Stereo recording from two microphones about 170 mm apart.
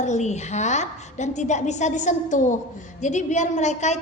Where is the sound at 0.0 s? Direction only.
45° left (ahead or behind).